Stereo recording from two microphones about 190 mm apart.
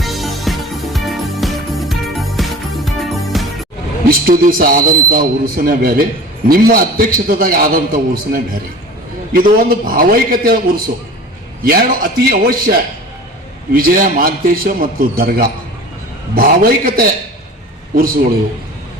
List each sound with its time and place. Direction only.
0.0 s music: centre (ahead or behind)
4.3 s a man's voice: 50° right (ahead or behind)
11.6 s a man's voice: 50° right (ahead or behind)
13.7 s a man's voice: 50° right (ahead or behind)